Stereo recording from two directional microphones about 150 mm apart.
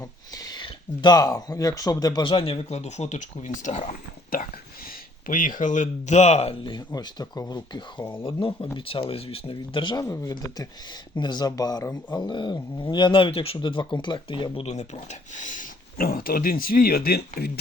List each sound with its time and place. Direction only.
0.0 s speech: 25° left (ahead or behind); by 17.5 s 90° left